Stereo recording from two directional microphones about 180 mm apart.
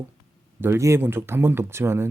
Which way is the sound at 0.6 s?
15° right (ahead or behind).